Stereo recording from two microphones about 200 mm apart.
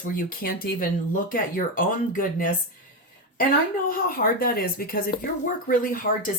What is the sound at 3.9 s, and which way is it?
Speech, 45° left (ahead or behind).